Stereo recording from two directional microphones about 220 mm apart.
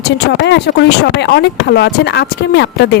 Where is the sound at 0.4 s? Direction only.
50° left (ahead or behind).